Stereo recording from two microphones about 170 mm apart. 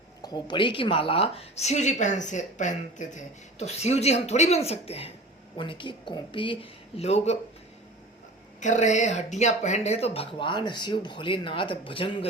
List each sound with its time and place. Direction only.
0.2 s a woman's voice: 25° left (ahead or behind)
8.6 s a woman's voice: 45° left (ahead or behind); by 12.3 s 30° left (ahead or behind)